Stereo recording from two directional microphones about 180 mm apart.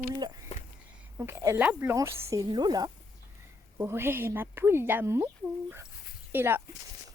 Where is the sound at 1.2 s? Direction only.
15° right (ahead or behind).